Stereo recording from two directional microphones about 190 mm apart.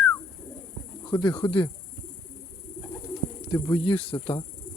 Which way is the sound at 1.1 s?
20° left (ahead or behind).